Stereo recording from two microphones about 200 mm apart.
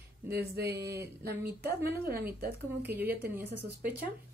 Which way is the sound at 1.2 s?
55° right (ahead or behind).